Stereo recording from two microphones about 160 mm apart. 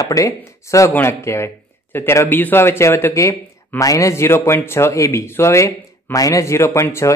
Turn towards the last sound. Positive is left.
turn(degrees=15)  # may be behind; listen again after turning